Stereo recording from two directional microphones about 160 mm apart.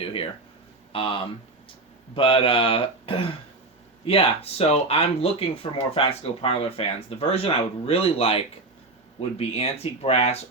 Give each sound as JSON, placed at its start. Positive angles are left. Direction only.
{"t": 0.0, "sound": "speech", "side_deg": 35}
{"t": 9.5, "sound": "speech", "side_deg": 40}